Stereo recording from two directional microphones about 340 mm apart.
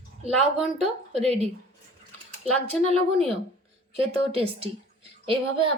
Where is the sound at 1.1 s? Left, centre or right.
Centre.